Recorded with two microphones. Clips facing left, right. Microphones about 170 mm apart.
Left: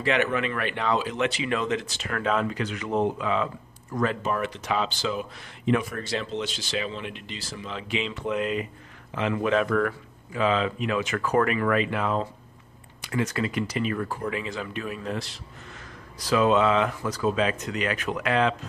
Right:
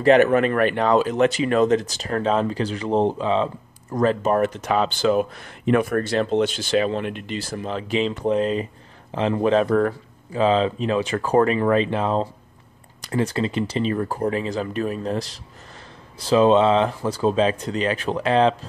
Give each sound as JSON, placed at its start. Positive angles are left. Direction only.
{"t": 0.0, "sound": "speech", "side_deg": -45}